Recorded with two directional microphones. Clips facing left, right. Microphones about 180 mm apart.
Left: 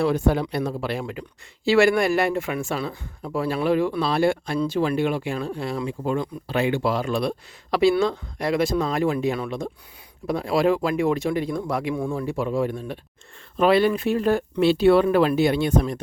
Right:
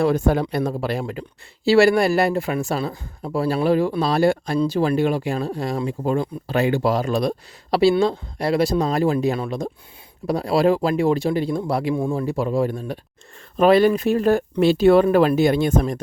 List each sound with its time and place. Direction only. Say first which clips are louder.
0.0 s speech: right 2 dB; 45° right (ahead or behind)